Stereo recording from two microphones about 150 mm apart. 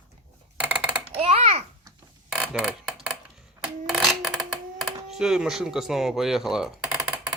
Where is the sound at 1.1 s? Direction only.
40° right (ahead or behind).